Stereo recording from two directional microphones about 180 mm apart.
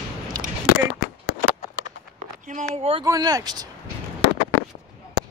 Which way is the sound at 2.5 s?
35° right (ahead or behind).